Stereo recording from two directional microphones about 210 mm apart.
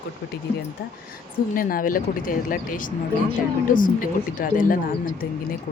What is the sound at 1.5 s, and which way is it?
Speech, 40° left (ahead or behind).